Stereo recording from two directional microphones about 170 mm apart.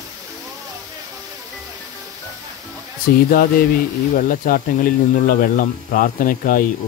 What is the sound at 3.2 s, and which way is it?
Speech, 55° left (ahead or behind).